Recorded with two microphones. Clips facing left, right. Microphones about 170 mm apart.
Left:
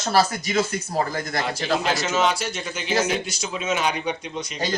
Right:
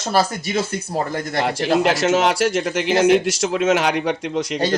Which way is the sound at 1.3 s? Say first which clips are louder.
Right 7 dB; 65° right (ahead or behind).